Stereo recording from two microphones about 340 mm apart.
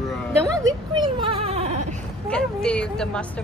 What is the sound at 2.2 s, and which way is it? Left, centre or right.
A woman's voice, centre.